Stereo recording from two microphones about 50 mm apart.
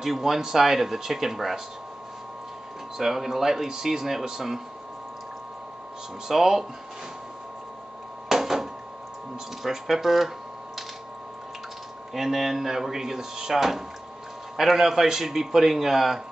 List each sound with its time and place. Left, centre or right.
0.0 s speech: centre
3.0 s speech: centre
6.2 s speech: centre
8.3 s a sound: centre
9.6 s speech: centre
12.1 s speech: centre